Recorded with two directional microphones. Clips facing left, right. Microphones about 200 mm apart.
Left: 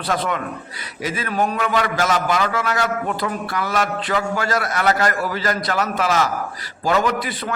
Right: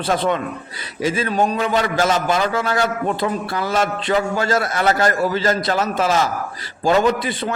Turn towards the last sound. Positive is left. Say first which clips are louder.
# right 4 dB
turn(degrees=-25)  # may be behind; listen again after turning